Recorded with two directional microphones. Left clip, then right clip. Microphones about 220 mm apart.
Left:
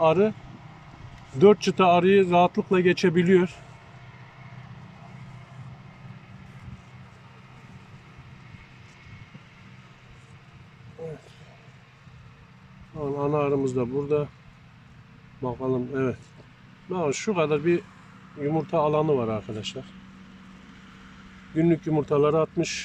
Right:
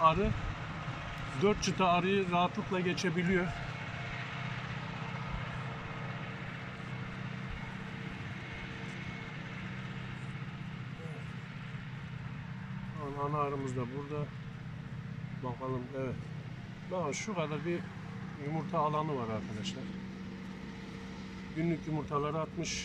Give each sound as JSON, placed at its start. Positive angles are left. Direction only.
{"t": 0.0, "sound": "speech", "side_deg": 40}
{"t": 1.4, "sound": "speech", "side_deg": 40}
{"t": 13.0, "sound": "a sound", "side_deg": 40}
{"t": 15.4, "sound": "speech", "side_deg": 40}
{"t": 21.6, "sound": "speech", "side_deg": 40}